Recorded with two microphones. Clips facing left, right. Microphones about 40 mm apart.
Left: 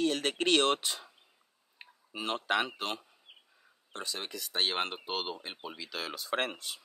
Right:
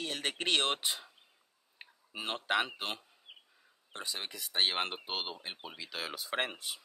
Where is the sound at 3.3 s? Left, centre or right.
Right.